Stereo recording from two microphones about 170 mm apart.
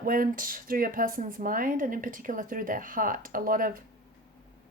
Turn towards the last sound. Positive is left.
turn(degrees=-55)  # may be behind; listen again after turning